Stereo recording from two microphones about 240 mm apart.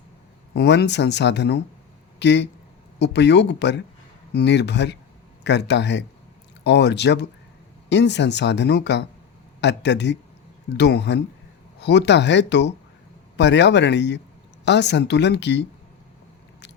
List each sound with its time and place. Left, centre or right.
0.5 s speech: left